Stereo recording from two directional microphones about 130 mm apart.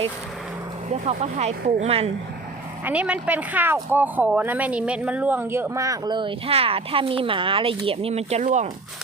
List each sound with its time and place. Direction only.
1.0 s speech: 55° right (ahead or behind)
2.8 s a woman's voice: 10° right (ahead or behind); by 8.7 s 65° right (ahead or behind)